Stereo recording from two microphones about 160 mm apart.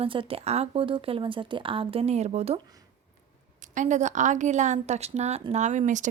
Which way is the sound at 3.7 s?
50° right (ahead or behind).